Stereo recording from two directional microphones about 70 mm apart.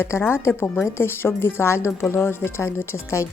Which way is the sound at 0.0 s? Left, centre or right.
Left.